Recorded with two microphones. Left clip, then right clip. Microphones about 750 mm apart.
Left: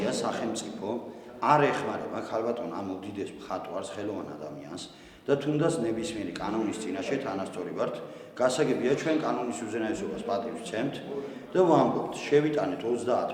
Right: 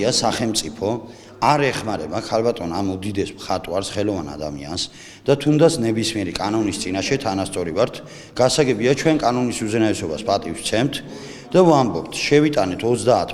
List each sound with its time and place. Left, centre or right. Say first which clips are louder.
0.0 s a man's voice: right 10 dB; right